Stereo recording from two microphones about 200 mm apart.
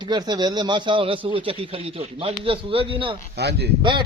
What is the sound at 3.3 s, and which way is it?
Speech, 55° right (ahead or behind).